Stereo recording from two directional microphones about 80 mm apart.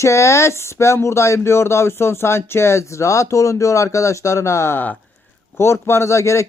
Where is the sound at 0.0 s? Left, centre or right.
Left.